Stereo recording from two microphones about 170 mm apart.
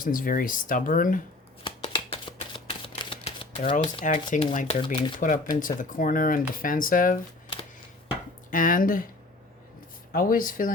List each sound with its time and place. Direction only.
0.0 s speech: 55° left (ahead or behind)
1.6 s shuffling cards: 30° left (ahead or behind)
4.0 s speech: 50° left (ahead or behind)
4.7 s speech: 35° left (ahead or behind)
5.2 s speech: 50° left (ahead or behind)
8.4 s speech: 55° left (ahead or behind)
10.1 s speech: 55° left (ahead or behind)